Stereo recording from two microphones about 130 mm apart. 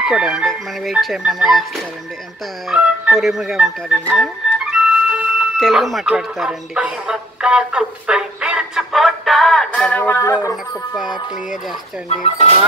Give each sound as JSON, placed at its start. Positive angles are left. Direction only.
{"t": 0.0, "sound": "speech", "side_deg": -5}
{"t": 4.1, "sound": "music", "side_deg": -5}
{"t": 5.6, "sound": "speech", "side_deg": 0}
{"t": 10.3, "sound": "speech", "side_deg": 25}
{"t": 12.1, "sound": "speech", "side_deg": 55}